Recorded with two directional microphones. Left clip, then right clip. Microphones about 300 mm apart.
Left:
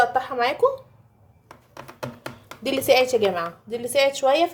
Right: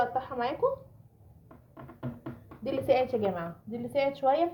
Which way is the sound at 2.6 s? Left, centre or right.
Left.